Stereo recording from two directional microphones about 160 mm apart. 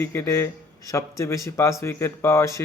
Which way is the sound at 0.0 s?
15° left (ahead or behind).